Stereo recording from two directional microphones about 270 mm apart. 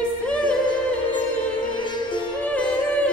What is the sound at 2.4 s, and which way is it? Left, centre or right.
Music, centre.